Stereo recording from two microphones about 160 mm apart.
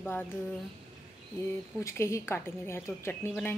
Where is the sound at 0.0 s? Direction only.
10° left (ahead or behind).